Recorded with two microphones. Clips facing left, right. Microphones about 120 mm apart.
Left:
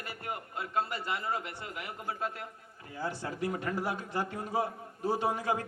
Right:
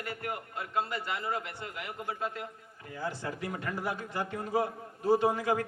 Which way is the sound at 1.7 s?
25° left (ahead or behind).